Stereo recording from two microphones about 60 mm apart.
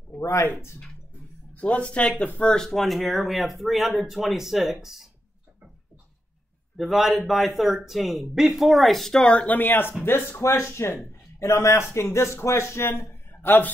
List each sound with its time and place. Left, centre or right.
0.2 s speech: left
1.6 s speech: left; by 4.7 s centre
6.8 s speech: centre
9.5 s a man's voice: left